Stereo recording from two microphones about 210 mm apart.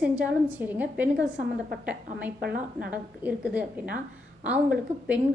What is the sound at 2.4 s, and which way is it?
Speech, 45° right (ahead or behind).